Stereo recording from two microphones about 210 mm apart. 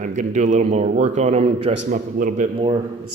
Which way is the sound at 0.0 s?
35° right (ahead or behind).